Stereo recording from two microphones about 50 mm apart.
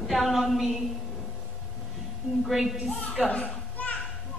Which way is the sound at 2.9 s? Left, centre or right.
Left.